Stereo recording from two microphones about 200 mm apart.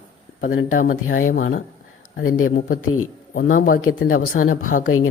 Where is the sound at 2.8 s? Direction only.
90° left.